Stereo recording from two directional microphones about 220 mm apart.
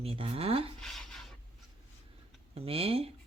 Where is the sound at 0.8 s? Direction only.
Centre (ahead or behind).